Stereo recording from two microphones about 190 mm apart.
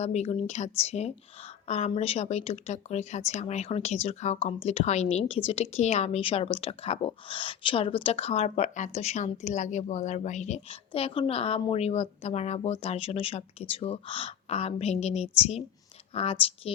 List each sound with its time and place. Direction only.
0.0 s speech: 35° left (ahead or behind)